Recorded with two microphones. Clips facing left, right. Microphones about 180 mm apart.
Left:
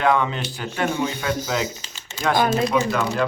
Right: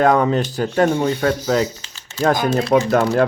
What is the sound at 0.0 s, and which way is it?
Speech, 40° right (ahead or behind).